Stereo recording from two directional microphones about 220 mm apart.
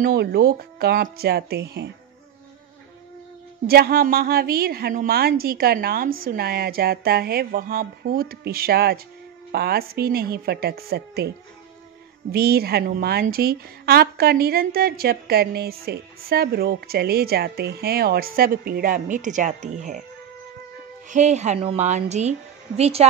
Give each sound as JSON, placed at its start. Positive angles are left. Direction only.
{"t": 0.0, "sound": "a woman's voice", "side_deg": -45}
{"t": 3.6, "sound": "a woman's voice", "side_deg": -45}
{"t": 21.1, "sound": "a woman's voice", "side_deg": -30}